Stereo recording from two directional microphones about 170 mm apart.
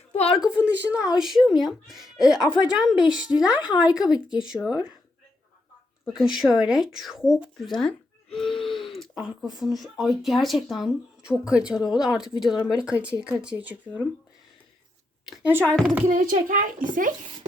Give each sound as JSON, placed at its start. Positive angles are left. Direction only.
{"t": 0.1, "sound": "a sound", "side_deg": 35}
{"t": 0.3, "sound": "speech", "side_deg": -5}
{"t": 6.1, "sound": "speech", "side_deg": 0}
{"t": 7.8, "sound": "a sound", "side_deg": 0}
{"t": 9.2, "sound": "speech", "side_deg": 0}
{"t": 15.3, "sound": "a woman's voice", "side_deg": -10}
{"t": 16.0, "sound": "a child's voice", "side_deg": -50}